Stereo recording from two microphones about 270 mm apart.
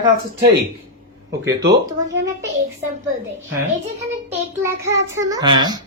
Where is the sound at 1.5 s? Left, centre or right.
Centre.